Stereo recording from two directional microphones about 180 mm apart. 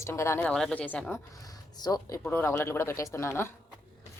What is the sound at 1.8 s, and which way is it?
A woman's voice, 20° left (ahead or behind).